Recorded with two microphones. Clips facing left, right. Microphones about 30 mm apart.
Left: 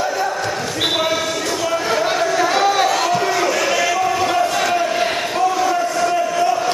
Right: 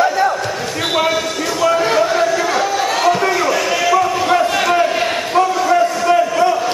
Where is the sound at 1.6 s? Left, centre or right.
Centre.